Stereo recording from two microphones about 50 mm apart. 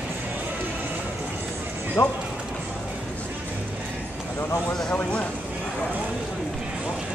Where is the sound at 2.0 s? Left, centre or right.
Left.